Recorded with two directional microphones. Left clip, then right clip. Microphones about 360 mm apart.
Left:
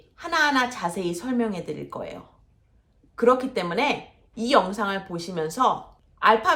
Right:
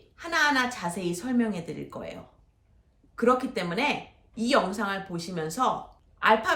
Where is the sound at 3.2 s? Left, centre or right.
Centre.